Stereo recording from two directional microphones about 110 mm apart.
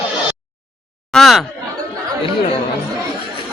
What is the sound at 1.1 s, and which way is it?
Speech, centre (ahead or behind).